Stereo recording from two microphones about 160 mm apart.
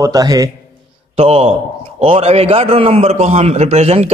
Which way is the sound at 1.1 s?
40° right (ahead or behind).